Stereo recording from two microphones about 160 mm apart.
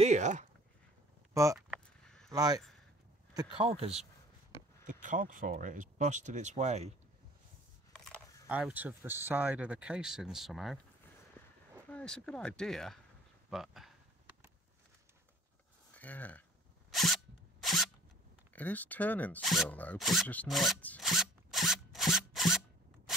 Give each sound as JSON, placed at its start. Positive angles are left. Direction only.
{"t": 0.0, "sound": "speech", "side_deg": -45}
{"t": 1.3, "sound": "speech", "side_deg": -20}
{"t": 2.0, "sound": "a sound", "side_deg": 5}
{"t": 2.3, "sound": "speech", "side_deg": -25}
{"t": 4.8, "sound": "speech", "side_deg": -55}
{"t": 7.9, "sound": "a sound", "side_deg": 5}
{"t": 8.5, "sound": "speech", "side_deg": -10}
{"t": 11.4, "sound": "a sound", "side_deg": 15}
{"t": 11.9, "sound": "speech", "side_deg": 5}
{"t": 13.5, "sound": "a sound", "side_deg": 0}
{"t": 15.9, "sound": "speech", "side_deg": 10}
{"t": 16.9, "sound": "zipper", "side_deg": 0}
{"t": 18.5, "sound": "speech", "side_deg": 10}
{"t": 21.0, "sound": "rub", "side_deg": 0}